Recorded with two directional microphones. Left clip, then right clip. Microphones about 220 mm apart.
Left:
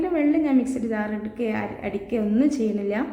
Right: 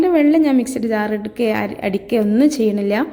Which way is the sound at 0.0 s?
40° right (ahead or behind).